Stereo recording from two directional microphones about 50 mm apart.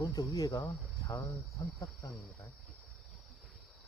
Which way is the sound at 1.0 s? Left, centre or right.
Left.